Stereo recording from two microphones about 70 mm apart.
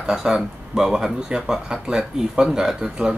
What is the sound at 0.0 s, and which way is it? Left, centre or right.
Speech, centre.